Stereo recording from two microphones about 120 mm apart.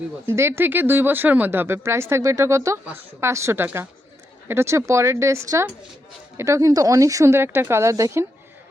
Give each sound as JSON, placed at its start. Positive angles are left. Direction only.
{"t": 0.3, "sound": "speech", "side_deg": -20}